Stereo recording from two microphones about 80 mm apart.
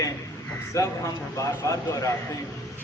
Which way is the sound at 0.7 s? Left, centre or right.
Left.